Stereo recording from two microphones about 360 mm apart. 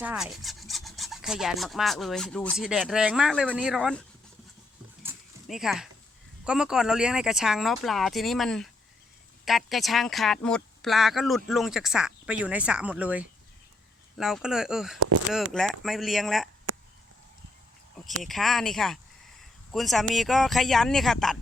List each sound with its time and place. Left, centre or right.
0.0 s filing: centre
5.0 s a sound: centre
6.4 s filing: centre
14.9 s speech: right
15.3 s filing: centre
18.2 s filing: centre